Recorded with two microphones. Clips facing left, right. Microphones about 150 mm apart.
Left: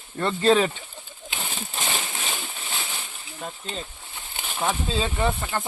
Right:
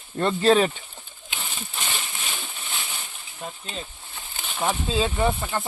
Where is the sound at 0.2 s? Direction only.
15° right (ahead or behind).